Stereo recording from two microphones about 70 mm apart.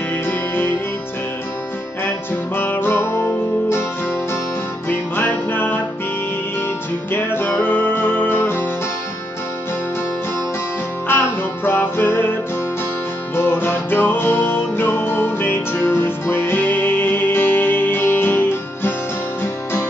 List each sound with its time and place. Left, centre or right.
0.3 s music: left
2.0 s music: left
4.8 s music: left
7.1 s music: left
11.1 s music: left
13.4 s music: left